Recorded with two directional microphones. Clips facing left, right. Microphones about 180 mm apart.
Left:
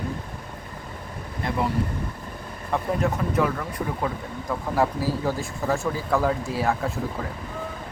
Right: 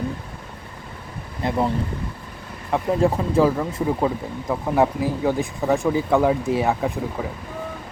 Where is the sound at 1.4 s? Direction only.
25° right (ahead or behind).